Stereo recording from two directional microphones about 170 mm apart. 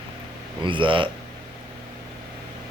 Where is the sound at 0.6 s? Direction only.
30° right (ahead or behind).